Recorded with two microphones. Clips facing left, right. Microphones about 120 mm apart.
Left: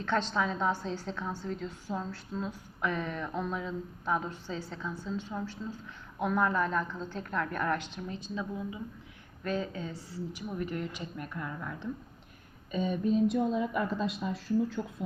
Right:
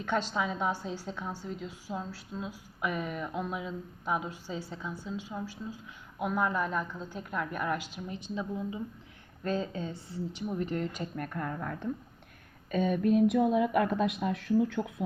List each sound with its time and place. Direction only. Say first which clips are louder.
0.0 s a woman's voice: left 1 dB; 10° right (ahead or behind)
8.0 s a woman's voice: right 1 dB; 20° right (ahead or behind); by 14.1 s 60° right (ahead or behind)
14.4 s speech: right 2 dB; 70° right (ahead or behind)